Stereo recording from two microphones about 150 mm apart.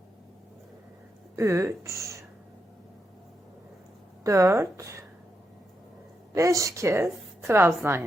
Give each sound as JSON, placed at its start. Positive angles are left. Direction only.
{"t": 1.4, "sound": "speech", "side_deg": -20}
{"t": 4.2, "sound": "speech", "side_deg": -20}
{"t": 6.3, "sound": "a woman's voice", "side_deg": -20}